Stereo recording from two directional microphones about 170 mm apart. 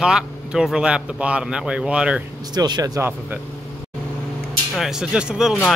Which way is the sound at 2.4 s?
25° right (ahead or behind).